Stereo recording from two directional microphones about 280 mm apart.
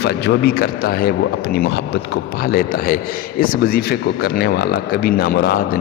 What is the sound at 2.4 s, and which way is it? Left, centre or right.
Speech, left.